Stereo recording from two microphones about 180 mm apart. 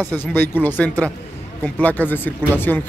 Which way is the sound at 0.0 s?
10° left (ahead or behind).